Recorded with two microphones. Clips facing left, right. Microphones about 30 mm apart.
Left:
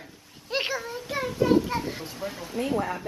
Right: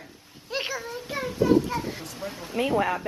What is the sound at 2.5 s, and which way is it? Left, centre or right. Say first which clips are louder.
Speech: right 3 dB; right.